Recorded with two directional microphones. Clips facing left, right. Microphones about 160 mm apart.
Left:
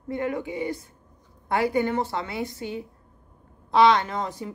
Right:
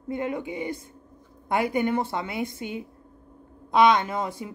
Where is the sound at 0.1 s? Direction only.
20° right (ahead or behind).